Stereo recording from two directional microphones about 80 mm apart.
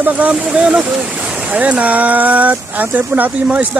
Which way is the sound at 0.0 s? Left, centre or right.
Centre.